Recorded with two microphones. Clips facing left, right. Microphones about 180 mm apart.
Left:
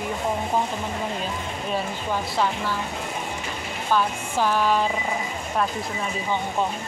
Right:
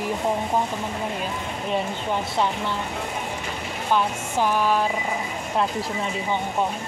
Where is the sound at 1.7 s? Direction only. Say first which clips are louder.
Right 2 dB; 20° right (ahead or behind).